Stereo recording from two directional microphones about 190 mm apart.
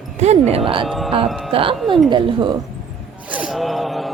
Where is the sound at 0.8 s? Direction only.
Centre (ahead or behind).